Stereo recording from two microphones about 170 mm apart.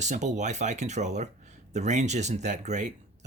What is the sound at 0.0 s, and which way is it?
Speech, 45° right (ahead or behind).